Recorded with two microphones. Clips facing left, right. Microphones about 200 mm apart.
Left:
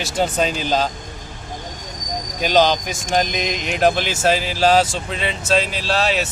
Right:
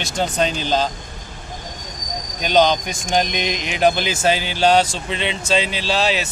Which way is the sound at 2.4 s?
5° left (ahead or behind).